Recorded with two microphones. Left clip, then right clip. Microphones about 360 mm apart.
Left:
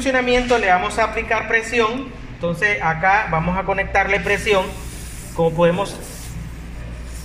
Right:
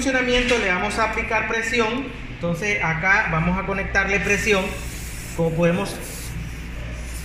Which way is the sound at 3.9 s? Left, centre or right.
Left.